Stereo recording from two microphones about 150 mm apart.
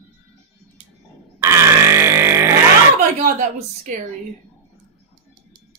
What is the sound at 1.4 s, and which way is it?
Grunt, 20° right (ahead or behind).